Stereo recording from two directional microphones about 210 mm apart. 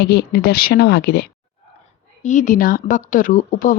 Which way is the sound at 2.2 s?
35° left (ahead or behind).